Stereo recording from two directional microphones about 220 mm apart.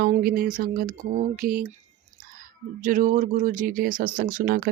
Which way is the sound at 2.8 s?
35° right (ahead or behind).